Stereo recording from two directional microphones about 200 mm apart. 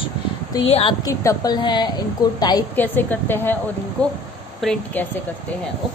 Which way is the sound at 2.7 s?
10° left (ahead or behind).